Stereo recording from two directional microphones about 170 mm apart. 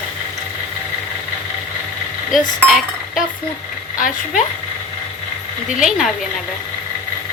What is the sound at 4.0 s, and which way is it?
Speech, 50° left (ahead or behind).